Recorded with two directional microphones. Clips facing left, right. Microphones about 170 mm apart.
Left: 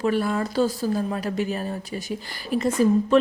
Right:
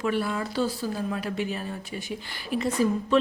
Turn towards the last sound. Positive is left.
turn(degrees=45)  # may be behind; listen again after turning